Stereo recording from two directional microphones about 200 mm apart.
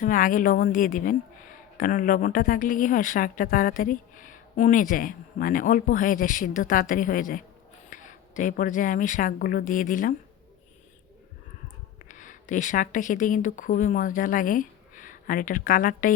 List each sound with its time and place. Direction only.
0.0 s a woman's voice: 45° left (ahead or behind)
12.0 s a woman's voice: 40° left (ahead or behind)